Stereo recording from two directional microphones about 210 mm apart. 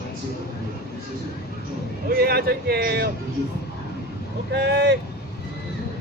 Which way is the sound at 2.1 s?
45° right (ahead or behind).